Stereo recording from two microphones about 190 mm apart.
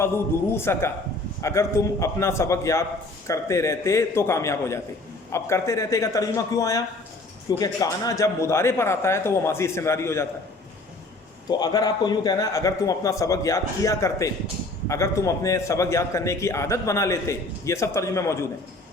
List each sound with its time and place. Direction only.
0.5 s a man's voice: 15° left (ahead or behind)
11.4 s a man's voice: 20° left (ahead or behind)